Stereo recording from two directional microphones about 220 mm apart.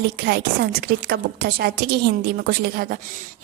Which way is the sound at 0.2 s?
45° right (ahead or behind).